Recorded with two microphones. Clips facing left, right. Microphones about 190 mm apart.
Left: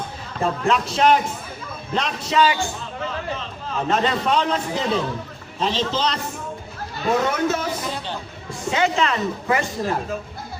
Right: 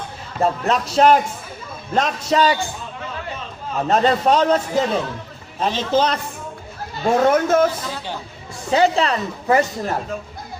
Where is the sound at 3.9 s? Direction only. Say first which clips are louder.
Right 5 dB; 40° right (ahead or behind).